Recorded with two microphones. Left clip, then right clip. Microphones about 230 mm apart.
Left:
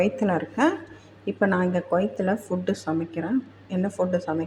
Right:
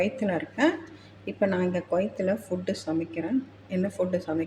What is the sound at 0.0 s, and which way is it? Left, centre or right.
A woman's voice, centre.